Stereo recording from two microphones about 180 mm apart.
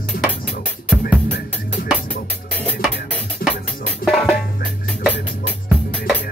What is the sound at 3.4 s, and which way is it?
Music, 55° left (ahead or behind).